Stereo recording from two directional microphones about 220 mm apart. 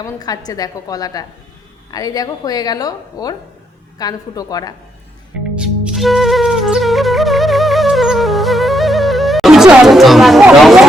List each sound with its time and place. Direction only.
0.0 s a woman's voice: 15° left (ahead or behind)
5.5 s flute: 5° right (ahead or behind)